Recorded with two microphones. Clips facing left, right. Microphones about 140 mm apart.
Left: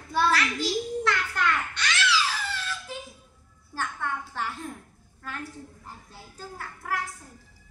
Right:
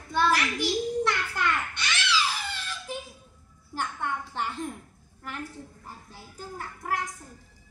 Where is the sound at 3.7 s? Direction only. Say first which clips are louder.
Even; 20° right (ahead or behind).